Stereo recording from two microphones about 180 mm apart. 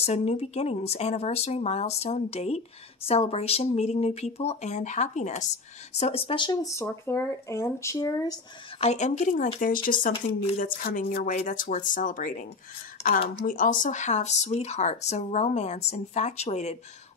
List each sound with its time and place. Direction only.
0.0 s speech: 35° left (ahead or behind); by 8.4 s 20° left (ahead or behind)
8.7 s speech: 35° left (ahead or behind)
13.0 s a sound: 35° left (ahead or behind)
13.4 s speech: 50° left (ahead or behind)